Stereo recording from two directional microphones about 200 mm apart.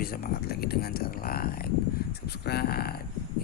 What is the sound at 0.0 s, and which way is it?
Speech, 50° left (ahead or behind).